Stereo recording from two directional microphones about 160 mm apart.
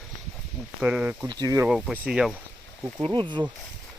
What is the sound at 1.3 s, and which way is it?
Speech, 25° right (ahead or behind).